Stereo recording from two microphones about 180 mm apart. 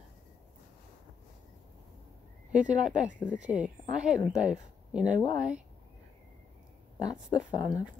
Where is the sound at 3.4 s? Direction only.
5° right (ahead or behind).